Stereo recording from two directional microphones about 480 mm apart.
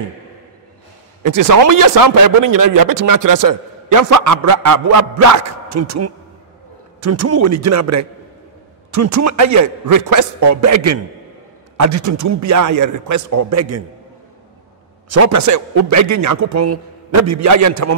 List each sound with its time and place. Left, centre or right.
1.2 s speech: right
15.0 s speech: right